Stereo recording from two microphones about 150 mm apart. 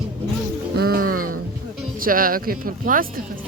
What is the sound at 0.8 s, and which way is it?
Music, 85° right.